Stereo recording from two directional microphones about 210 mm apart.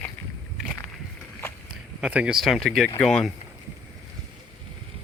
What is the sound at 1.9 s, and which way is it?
Speech, 5° right (ahead or behind).